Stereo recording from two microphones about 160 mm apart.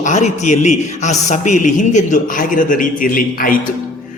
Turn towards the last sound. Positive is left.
turn(degrees=60)  # may be behind; listen again after turning